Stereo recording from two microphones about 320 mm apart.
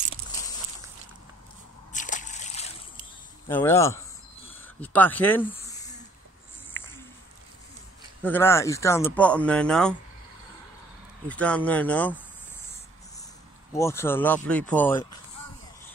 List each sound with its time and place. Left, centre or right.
1.9 s a sound: left
3.4 s speech: centre
4.6 s a sound: centre
8.2 s speech: centre
11.2 s speech: centre
13.7 s speech: centre